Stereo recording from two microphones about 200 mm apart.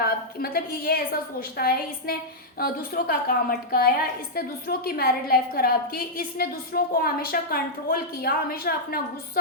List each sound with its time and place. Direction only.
0.0 s a woman's voice: 50° left (ahead or behind)